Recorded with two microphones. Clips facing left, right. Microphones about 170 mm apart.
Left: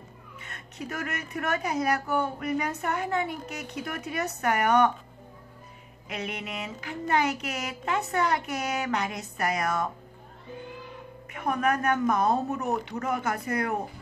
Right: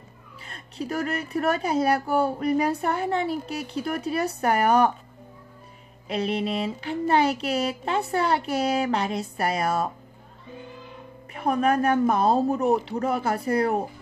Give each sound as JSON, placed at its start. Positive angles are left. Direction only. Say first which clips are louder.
{"t": 0.5, "sound": "a woman's voice", "louder": "right 6 dB", "side_deg": -30}
{"t": 6.0, "sound": "a woman's voice", "louder": "right 9 dB", "side_deg": -30}
{"t": 11.3, "sound": "a woman's voice", "louder": "right 4 dB", "side_deg": -30}